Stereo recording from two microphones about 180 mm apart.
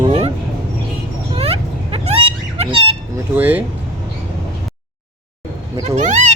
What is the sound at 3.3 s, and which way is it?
Speech, 10° right (ahead or behind).